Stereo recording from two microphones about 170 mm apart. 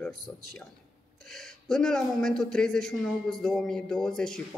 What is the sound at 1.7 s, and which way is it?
A man's voice, 5° left (ahead or behind).